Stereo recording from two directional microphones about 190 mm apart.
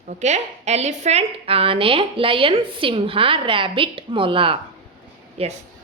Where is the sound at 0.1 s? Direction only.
35° right (ahead or behind).